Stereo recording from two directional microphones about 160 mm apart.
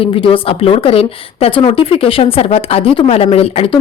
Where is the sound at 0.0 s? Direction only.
35° left (ahead or behind).